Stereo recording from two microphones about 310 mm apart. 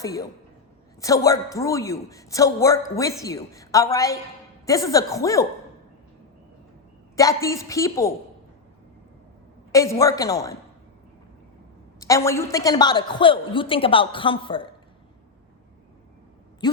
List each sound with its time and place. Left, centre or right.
0.0 s a man's voice: centre
7.2 s a man's voice: centre
9.7 s a man's voice: centre
11.9 s a man's voice: centre
16.6 s a sound: centre